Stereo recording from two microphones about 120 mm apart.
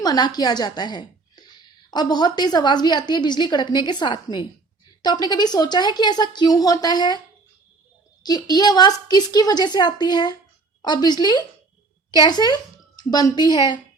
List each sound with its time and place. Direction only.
0.0 s a woman's voice: 35° left (ahead or behind)
8.2 s a woman's voice: 35° left (ahead or behind)